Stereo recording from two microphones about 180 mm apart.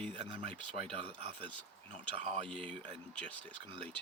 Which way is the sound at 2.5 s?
5° left (ahead or behind).